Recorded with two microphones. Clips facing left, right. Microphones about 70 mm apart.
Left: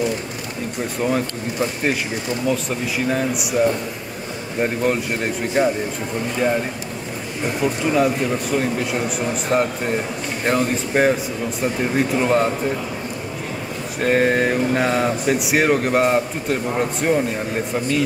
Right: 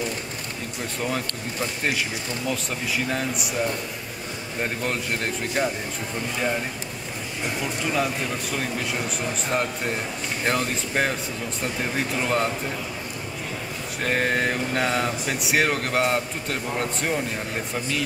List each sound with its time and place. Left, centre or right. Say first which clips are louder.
1.0 s speech: left 7 dB; centre
3.1 s speech: left 6 dB; centre
4.6 s speech: left 8 dB; centre
7.6 s speech: left 8 dB; centre
14.0 s speech: left 6 dB; centre